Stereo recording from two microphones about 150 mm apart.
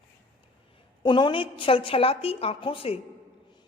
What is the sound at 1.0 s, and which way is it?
A woman's voice, 30° left (ahead or behind).